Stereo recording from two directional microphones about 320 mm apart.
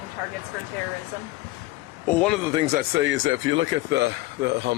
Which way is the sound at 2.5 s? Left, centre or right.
Centre.